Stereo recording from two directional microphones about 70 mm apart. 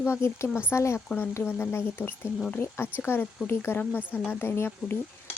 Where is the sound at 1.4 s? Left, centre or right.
Left.